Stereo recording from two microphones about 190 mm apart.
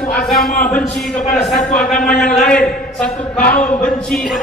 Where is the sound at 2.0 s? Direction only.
5° left (ahead or behind).